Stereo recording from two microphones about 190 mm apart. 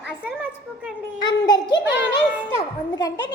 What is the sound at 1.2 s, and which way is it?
A child's voice, 20° left (ahead or behind).